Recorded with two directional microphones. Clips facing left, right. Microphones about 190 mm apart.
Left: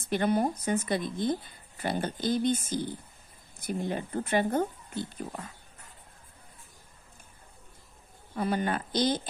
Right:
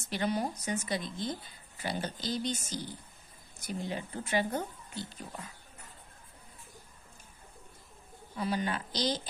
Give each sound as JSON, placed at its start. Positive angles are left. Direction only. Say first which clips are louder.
{"t": 0.0, "sound": "speech", "louder": "left 6 dB", "side_deg": 55}
{"t": 8.4, "sound": "speech", "louder": "left 4 dB", "side_deg": 55}